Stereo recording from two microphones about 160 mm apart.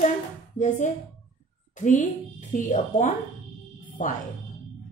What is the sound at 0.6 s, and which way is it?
A woman's voice, 50° left (ahead or behind).